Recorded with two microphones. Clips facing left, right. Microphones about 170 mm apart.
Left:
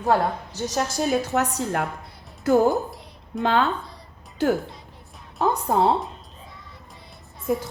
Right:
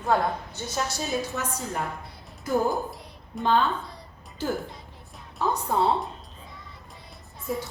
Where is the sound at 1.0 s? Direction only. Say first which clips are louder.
Left 7 dB; 70° left (ahead or behind).